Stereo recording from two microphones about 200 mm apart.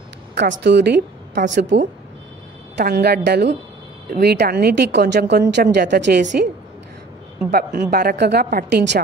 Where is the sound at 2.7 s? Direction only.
50° right (ahead or behind).